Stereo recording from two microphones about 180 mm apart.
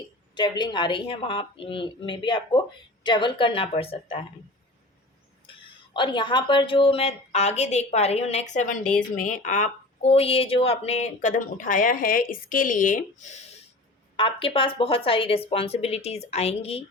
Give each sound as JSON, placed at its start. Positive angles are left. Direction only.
{"t": 0.3, "sound": "a woman's voice", "side_deg": 25}
{"t": 5.5, "sound": "speech", "side_deg": 25}
{"t": 14.2, "sound": "speech", "side_deg": 30}